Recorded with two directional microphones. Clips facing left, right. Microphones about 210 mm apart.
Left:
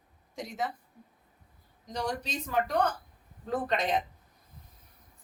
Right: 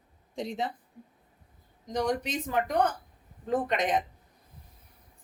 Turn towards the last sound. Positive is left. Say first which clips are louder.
# right 2 dB
turn(degrees=-15)  # may be behind; listen again after turning